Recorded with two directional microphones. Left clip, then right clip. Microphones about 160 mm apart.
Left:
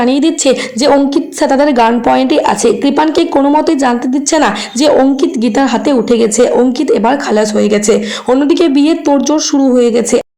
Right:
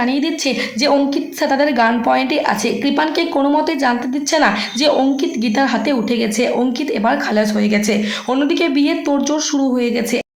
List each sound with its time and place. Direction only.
0.0 s a woman's voice: 40° left (ahead or behind)